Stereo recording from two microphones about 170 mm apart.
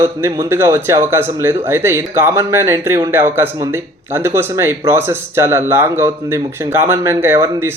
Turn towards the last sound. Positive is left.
turn(degrees=-15)  # may be behind; listen again after turning